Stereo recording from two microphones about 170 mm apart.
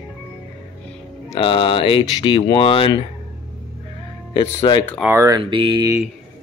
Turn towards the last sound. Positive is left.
turn(degrees=-25)  # may be behind; listen again after turning